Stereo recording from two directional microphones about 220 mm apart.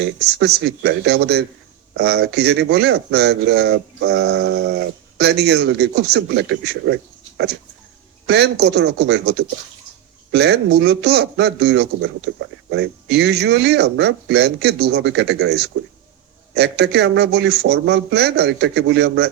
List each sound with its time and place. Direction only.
0.2 s speech: 50° right (ahead or behind)
10.3 s speech: 50° right (ahead or behind)